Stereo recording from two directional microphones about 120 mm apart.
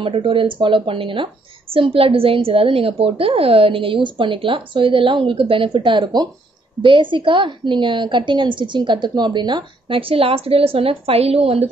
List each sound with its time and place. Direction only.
0.0 s a woman's voice: 45° right (ahead or behind)